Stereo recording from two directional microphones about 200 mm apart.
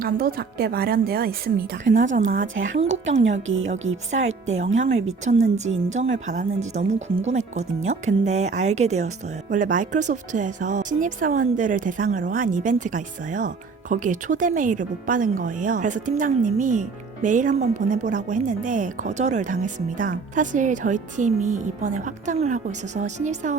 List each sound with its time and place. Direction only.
0.0 s speech: 50° right (ahead or behind)
1.9 s a woman's voice: 65° right (ahead or behind)
4.4 s a woman's voice: 35° right (ahead or behind)